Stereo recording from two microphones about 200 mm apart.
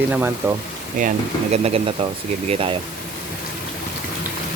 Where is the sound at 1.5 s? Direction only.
30° right (ahead or behind).